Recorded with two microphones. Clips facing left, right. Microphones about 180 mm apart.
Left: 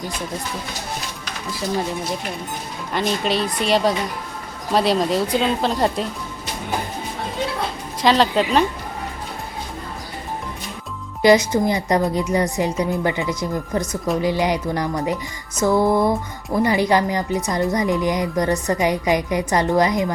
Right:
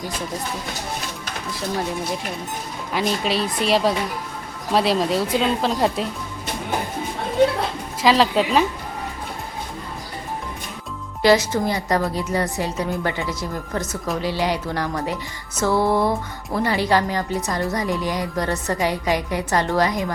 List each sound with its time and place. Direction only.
2.9 s speech: centre (ahead or behind)
8.0 s speech: centre (ahead or behind)
11.5 s a woman's voice: 15° left (ahead or behind)